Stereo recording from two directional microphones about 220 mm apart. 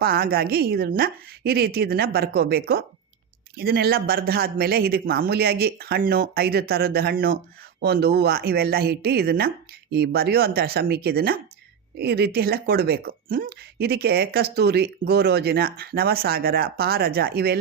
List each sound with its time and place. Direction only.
0.0 s speech: 40° right (ahead or behind)